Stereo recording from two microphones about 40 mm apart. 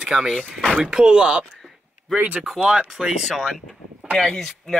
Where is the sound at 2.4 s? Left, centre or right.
Centre.